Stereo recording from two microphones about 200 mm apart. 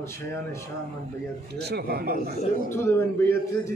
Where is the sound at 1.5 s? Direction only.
55° right (ahead or behind).